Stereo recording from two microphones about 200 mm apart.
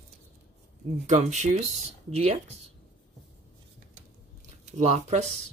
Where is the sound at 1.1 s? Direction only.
35° right (ahead or behind).